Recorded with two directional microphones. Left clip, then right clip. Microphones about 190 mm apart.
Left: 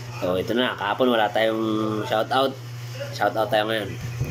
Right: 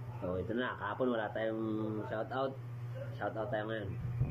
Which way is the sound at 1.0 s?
60° left (ahead or behind).